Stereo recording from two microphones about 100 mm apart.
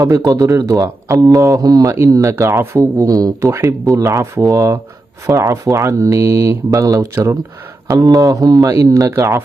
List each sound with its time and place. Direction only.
0.0 s speech: 35° right (ahead or behind)